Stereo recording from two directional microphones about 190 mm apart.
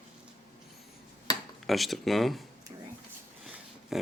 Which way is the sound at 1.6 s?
Centre (ahead or behind).